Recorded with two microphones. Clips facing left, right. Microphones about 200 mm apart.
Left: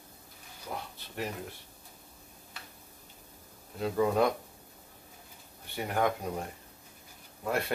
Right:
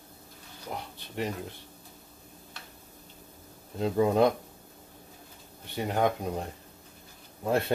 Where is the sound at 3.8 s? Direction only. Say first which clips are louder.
Right 3 dB; 25° right (ahead or behind).